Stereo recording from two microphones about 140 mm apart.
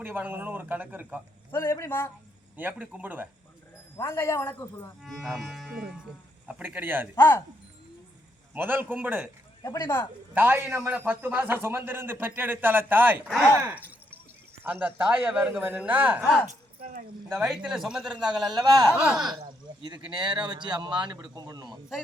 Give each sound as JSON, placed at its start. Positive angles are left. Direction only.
{"t": 0.0, "sound": "a man's voice", "side_deg": -15}
{"t": 1.5, "sound": "a man's voice", "side_deg": 15}
{"t": 2.6, "sound": "a man's voice", "side_deg": -10}
{"t": 3.9, "sound": "speech", "side_deg": 20}
{"t": 5.0, "sound": "a man's voice", "side_deg": 0}
{"t": 7.2, "sound": "a man's voice", "side_deg": 15}
{"t": 8.5, "sound": "a man's voice", "side_deg": -15}
{"t": 9.6, "sound": "a man's voice", "side_deg": 20}
{"t": 10.3, "sound": "a man's voice", "side_deg": -15}
{"t": 13.6, "sound": "a sound", "side_deg": -15}
{"t": 14.6, "sound": "a man's voice", "side_deg": -10}
{"t": 16.5, "sound": "a sound", "side_deg": -75}
{"t": 17.2, "sound": "a man's voice", "side_deg": 0}
{"t": 19.4, "sound": "speech", "side_deg": -35}